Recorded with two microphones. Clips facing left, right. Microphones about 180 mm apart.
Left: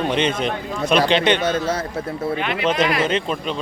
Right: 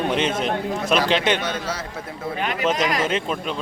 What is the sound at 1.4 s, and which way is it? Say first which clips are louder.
Speech: left 6 dB; 50° left (ahead or behind).